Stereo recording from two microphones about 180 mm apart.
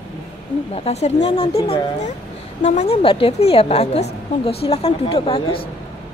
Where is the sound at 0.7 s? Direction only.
35° left (ahead or behind).